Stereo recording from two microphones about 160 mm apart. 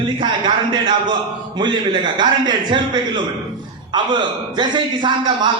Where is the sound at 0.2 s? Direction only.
30° right (ahead or behind).